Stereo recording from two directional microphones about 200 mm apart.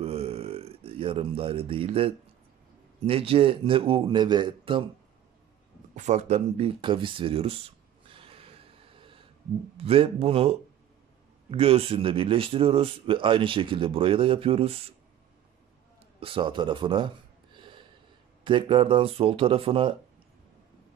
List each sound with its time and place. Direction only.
0.0 s a sound: 30° right (ahead or behind)
3.0 s speech: 30° right (ahead or behind)
5.9 s a sound: 35° right (ahead or behind)
9.8 s speech: 30° right (ahead or behind)
16.2 s gasp: 25° right (ahead or behind)
18.4 s speech: 25° right (ahead or behind)